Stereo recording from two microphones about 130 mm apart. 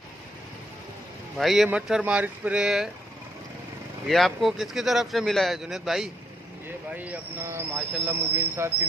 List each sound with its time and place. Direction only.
1.4 s a man's voice: centre (ahead or behind)
4.1 s a man's voice: centre (ahead or behind); by 8.7 s 15° right (ahead or behind)